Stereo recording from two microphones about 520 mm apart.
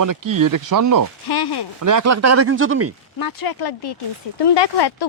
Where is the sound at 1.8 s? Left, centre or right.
Right.